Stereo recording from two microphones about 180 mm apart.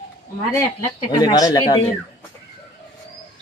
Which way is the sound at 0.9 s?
20° left (ahead or behind).